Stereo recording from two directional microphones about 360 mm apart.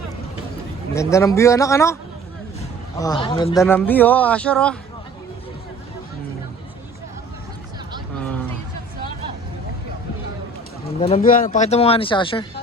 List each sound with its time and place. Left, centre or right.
0.9 s speech: centre
8.2 s a sound: centre
11.0 s speech: centre